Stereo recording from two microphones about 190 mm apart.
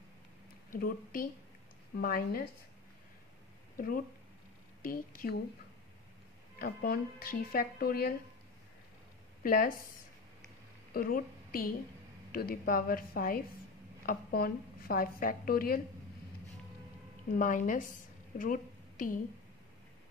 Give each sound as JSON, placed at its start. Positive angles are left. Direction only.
{"t": 0.7, "sound": "a woman's voice", "side_deg": 50}
{"t": 3.7, "sound": "a woman's voice", "side_deg": 50}
{"t": 6.6, "sound": "a woman's voice", "side_deg": 50}
{"t": 9.4, "sound": "a woman's voice", "side_deg": 50}
{"t": 10.9, "sound": "a woman's voice", "side_deg": 50}
{"t": 17.4, "sound": "a woman's voice", "side_deg": 45}